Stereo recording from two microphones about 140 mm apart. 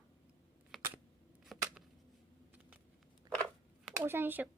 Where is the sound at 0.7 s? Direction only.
Centre (ahead or behind).